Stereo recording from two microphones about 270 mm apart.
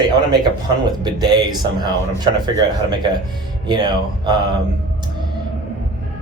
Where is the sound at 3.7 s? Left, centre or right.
Centre.